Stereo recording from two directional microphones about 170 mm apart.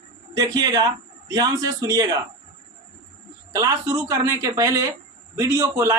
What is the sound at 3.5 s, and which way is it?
A man's voice, 20° right (ahead or behind).